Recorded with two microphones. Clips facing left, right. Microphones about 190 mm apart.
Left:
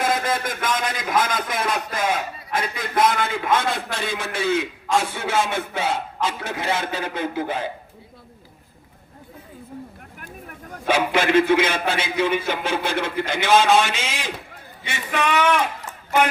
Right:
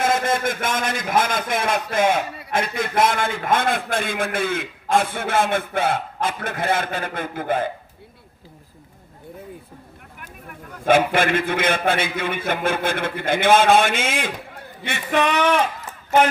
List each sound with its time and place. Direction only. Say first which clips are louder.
0.6 s a man's voice: right 1 dB; 50° right (ahead or behind)
10.8 s a man's voice: right 3 dB; 50° right (ahead or behind)
15.2 s speech: right 1 dB; 35° right (ahead or behind)